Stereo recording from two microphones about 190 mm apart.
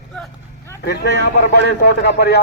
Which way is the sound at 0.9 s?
60° left (ahead or behind).